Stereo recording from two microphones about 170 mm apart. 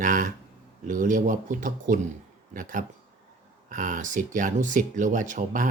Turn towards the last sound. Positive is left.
turn(degrees=-50)  # may be behind; listen again after turning